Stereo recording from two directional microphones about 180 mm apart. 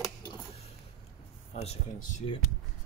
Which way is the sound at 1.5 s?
35° left (ahead or behind).